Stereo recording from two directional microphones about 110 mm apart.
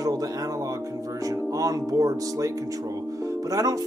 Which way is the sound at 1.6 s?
35° right (ahead or behind).